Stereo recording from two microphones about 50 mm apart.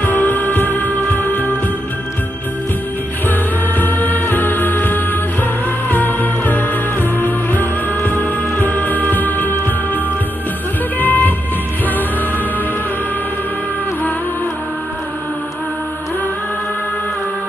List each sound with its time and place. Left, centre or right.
0.0 s music: left
3.3 s music: left